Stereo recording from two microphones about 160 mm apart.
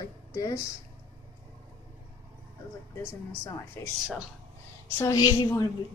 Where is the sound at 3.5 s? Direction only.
15° left (ahead or behind).